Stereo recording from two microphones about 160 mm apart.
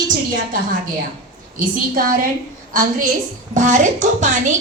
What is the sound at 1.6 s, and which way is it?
Speech, 60° right (ahead or behind).